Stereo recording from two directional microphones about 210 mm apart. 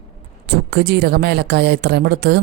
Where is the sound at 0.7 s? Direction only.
50° right (ahead or behind).